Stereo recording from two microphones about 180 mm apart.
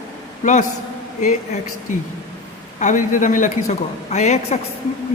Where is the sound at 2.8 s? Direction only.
45° left (ahead or behind).